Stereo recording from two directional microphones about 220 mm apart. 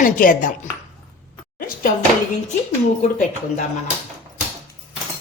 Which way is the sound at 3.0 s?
35° left (ahead or behind).